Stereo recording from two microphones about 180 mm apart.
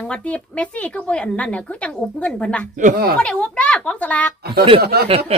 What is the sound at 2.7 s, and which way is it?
Speech, 55° right (ahead or behind).